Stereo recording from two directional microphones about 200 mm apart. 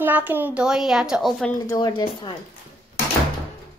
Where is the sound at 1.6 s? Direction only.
20° left (ahead or behind).